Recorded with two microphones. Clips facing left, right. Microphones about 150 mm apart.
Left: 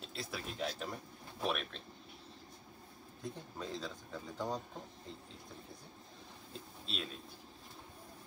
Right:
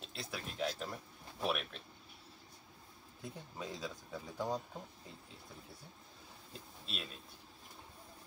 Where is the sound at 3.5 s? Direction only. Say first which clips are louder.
Right 1 dB; 10° right (ahead or behind).